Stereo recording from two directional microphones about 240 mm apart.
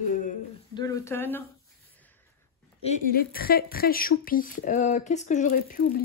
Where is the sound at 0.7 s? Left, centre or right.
Centre.